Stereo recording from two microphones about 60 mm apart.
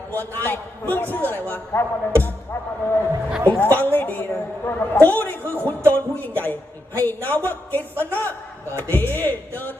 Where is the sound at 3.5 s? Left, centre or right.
Left.